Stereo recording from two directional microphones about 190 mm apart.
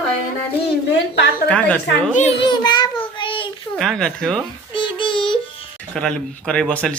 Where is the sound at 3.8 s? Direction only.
Centre (ahead or behind).